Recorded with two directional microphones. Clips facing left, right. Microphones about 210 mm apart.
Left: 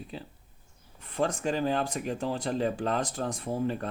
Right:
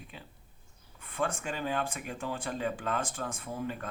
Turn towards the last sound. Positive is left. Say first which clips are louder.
# left 6 dB
turn(degrees=35)  # may be behind; listen again after turning